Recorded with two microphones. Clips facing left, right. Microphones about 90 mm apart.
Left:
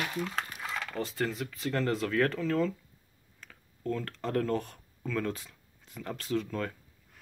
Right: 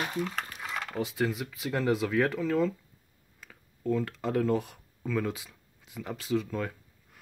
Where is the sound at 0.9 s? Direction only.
5° right (ahead or behind).